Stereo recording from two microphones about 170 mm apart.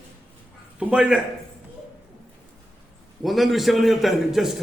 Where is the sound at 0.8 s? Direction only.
5° right (ahead or behind).